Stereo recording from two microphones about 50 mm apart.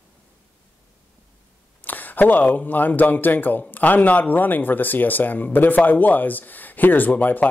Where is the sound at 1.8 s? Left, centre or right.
Left.